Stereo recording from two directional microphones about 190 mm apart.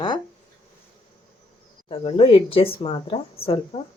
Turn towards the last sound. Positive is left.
turn(degrees=30)  # may be behind; listen again after turning